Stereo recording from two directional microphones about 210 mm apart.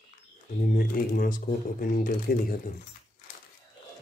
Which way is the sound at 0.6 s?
40° left (ahead or behind).